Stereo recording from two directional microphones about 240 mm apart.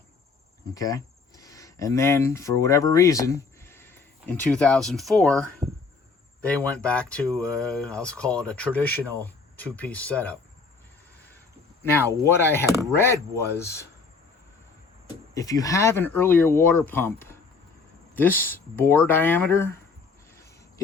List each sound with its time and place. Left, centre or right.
0.7 s speech: centre
11.8 s speech: centre
15.4 s speech: centre
18.3 s speech: left
18.8 s speech: centre
20.3 s a sound: centre